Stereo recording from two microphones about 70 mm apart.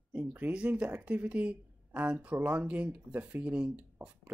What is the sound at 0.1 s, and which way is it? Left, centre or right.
Speech, right.